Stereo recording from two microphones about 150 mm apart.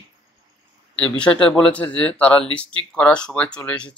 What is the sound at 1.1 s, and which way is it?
Speech, 5° left (ahead or behind).